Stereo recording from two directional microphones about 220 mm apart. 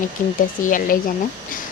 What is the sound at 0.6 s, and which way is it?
Speech, 35° left (ahead or behind).